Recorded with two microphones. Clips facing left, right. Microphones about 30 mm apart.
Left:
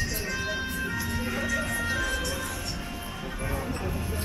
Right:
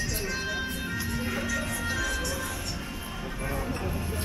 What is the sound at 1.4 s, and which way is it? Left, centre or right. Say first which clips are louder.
Music: left 2 dB; centre.